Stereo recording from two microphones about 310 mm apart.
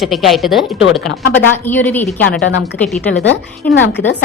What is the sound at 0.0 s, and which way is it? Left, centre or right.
Speech, centre.